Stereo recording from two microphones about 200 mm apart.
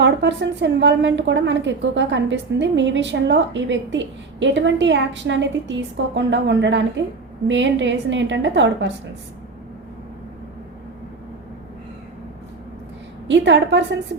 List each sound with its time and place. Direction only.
0.0 s a woman's voice: 60° right (ahead or behind)
13.2 s a woman's voice: 60° right (ahead or behind)